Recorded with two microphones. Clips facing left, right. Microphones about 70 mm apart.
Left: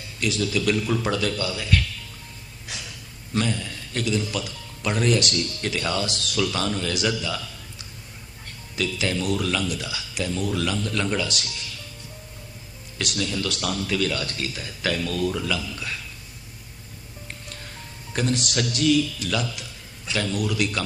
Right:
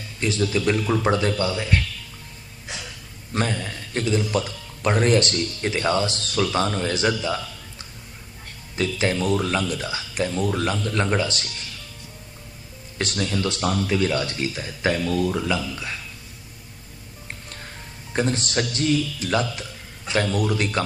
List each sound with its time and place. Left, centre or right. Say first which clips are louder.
0.2 s speech: right 2 dB; right
3.3 s speech: right 1 dB; right
13.0 s speech: right 2 dB; right
18.1 s speech: right 2 dB; right